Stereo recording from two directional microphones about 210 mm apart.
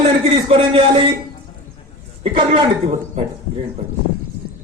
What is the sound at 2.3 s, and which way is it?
Speech, 25° right (ahead or behind).